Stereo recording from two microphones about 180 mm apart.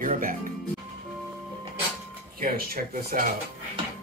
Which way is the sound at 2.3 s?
55° right (ahead or behind).